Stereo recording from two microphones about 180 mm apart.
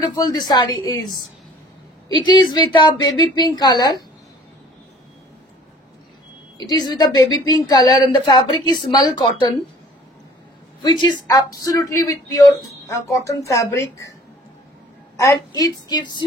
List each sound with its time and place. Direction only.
0.1 s a woman's voice: 20° left (ahead or behind)
2.2 s a woman's voice: 20° left (ahead or behind)
6.7 s a woman's voice: 20° left (ahead or behind)
10.8 s speech: 25° left (ahead or behind)
15.1 s a woman's voice: 20° left (ahead or behind)